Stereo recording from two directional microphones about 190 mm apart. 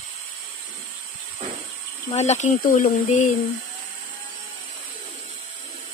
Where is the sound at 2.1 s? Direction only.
35° left (ahead or behind).